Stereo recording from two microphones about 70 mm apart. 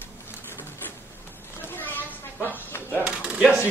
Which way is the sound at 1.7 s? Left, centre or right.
Left.